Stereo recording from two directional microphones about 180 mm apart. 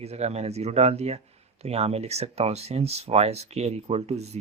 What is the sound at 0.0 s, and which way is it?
Speech, 35° right (ahead or behind).